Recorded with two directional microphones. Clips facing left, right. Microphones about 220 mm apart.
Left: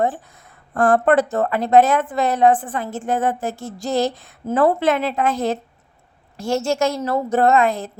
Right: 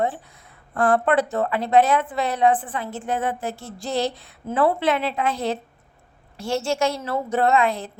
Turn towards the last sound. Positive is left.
turn(degrees=45)  # may be behind; listen again after turning